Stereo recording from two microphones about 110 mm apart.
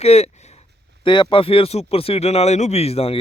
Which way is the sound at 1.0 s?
45° left (ahead or behind).